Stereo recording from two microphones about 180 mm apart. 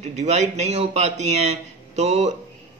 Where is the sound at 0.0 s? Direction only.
40° right (ahead or behind).